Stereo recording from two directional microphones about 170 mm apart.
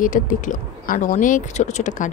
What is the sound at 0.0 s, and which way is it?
Speech, 50° left (ahead or behind).